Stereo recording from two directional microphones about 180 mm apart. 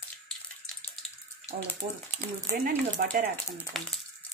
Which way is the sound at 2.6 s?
55° right (ahead or behind).